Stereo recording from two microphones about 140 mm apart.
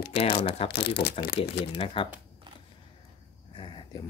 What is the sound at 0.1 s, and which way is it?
Speech, 50° left (ahead or behind).